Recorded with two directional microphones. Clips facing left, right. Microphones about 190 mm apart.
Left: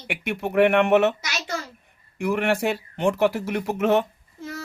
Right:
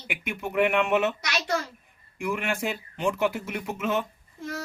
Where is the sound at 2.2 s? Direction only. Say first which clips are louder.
Left 6 dB; 65° left (ahead or behind).